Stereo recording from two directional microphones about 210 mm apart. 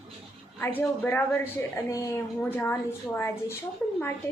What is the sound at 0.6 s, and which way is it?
A woman's voice, 10° left (ahead or behind).